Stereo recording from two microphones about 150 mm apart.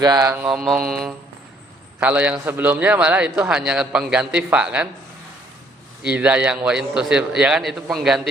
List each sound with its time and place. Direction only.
0.0 s mantra: 25° right (ahead or behind)
0.3 s a man's voice: 5° right (ahead or behind)
6.0 s a man's voice: 10° right (ahead or behind)